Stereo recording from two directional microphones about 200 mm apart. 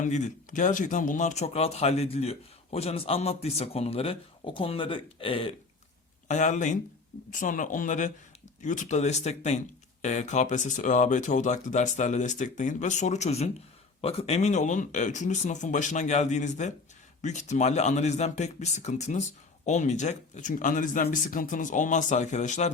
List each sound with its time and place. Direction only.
0.0 s speech: 40° left (ahead or behind)
6.2 s speech: 35° left (ahead or behind)